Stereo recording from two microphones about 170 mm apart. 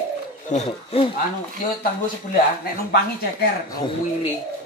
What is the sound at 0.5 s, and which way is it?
Speech, 45° left (ahead or behind).